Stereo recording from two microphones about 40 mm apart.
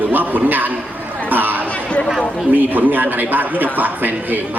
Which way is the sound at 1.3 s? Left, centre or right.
Right.